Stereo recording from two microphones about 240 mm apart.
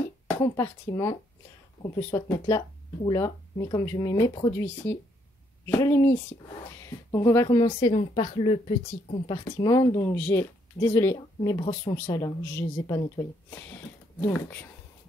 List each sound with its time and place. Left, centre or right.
0.4 s speech: centre